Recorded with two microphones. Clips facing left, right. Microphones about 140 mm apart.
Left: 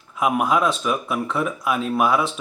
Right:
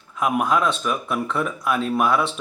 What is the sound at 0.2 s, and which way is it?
Speech, 5° left (ahead or behind).